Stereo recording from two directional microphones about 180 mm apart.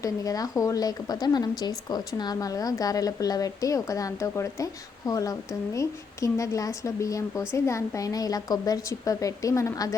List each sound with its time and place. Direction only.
0.0 s a woman's voice: 20° left (ahead or behind)